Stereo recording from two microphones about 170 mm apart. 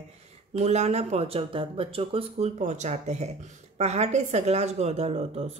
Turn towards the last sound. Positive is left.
turn(degrees=-35)  # may be behind; listen again after turning